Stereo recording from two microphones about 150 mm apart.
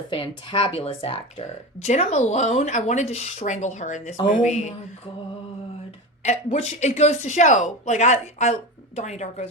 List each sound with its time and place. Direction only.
0.1 s speech: 35° left (ahead or behind); by 4.7 s 50° left (ahead or behind)
6.2 s speech: 50° left (ahead or behind)